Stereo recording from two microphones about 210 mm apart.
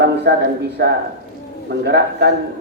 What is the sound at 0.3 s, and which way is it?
A man's voice, 55° right (ahead or behind).